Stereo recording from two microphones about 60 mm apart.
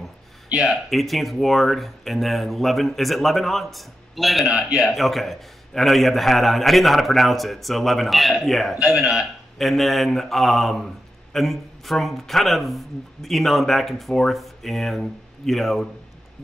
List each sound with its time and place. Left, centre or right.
0.6 s speech: centre
8.7 s a man's voice: centre
9.6 s speech: centre